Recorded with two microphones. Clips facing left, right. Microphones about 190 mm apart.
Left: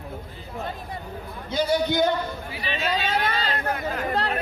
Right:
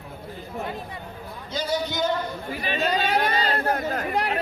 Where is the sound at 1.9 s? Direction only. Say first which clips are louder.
Left 4 dB; 55° left (ahead or behind).